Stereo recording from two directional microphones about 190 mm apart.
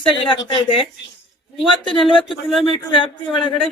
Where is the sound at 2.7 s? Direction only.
25° left (ahead or behind).